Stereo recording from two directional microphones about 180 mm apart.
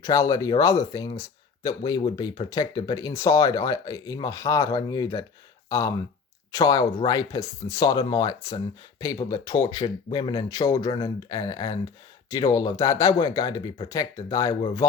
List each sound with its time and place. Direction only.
0.0 s speech: 20° left (ahead or behind)